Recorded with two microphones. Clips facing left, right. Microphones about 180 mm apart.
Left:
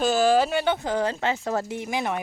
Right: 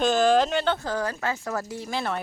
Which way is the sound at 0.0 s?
5° left (ahead or behind).